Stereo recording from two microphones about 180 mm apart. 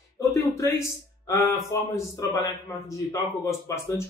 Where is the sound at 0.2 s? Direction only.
15° left (ahead or behind).